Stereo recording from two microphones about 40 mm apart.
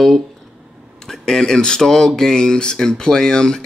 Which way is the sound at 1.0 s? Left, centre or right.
Centre.